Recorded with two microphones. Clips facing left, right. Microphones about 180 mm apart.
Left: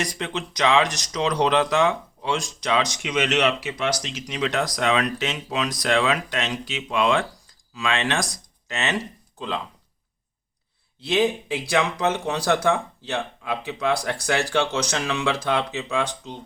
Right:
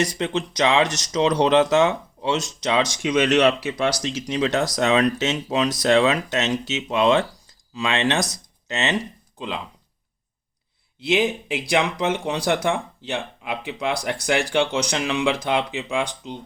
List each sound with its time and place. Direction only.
0.0 s speech: 25° right (ahead or behind)
11.0 s speech: 10° right (ahead or behind)